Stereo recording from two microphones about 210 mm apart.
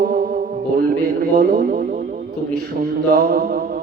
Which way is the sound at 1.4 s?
45° right (ahead or behind).